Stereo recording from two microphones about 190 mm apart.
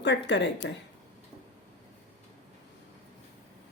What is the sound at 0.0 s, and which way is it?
Speech, 65° left (ahead or behind).